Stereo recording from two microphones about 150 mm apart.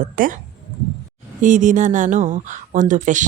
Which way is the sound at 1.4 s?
60° right (ahead or behind).